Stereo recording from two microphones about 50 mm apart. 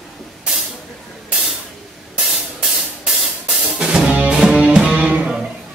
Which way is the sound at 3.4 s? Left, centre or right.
Centre.